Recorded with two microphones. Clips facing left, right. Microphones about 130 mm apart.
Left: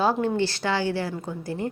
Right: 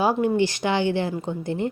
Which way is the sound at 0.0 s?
10° right (ahead or behind).